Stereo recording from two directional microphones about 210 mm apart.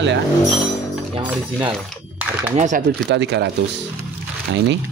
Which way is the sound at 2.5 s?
35° right (ahead or behind).